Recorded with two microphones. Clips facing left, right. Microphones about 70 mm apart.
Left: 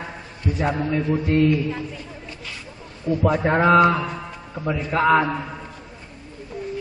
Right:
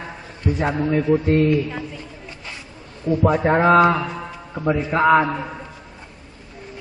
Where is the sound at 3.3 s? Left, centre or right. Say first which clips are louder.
Right 1 dB; centre.